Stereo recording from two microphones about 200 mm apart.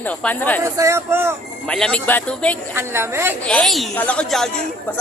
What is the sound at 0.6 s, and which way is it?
Speech, 15° right (ahead or behind).